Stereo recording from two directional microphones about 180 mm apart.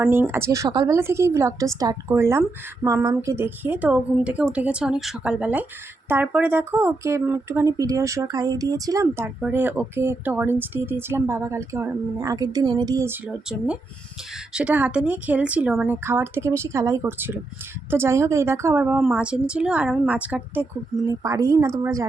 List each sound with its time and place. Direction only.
0.0 s speech: 15° right (ahead or behind)